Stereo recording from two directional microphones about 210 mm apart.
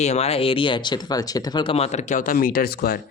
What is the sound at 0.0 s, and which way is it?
Speech, 30° left (ahead or behind).